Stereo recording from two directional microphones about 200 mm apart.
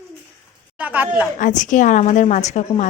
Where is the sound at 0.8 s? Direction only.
10° right (ahead or behind).